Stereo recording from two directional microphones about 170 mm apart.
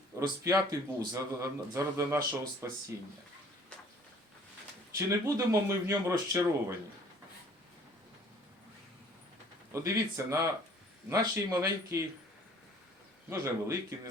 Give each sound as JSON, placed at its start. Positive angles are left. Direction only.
{"t": 0.2, "sound": "a man's voice", "side_deg": -20}
{"t": 4.9, "sound": "speech", "side_deg": -15}
{"t": 9.7, "sound": "speech", "side_deg": -20}
{"t": 13.4, "sound": "speech", "side_deg": -15}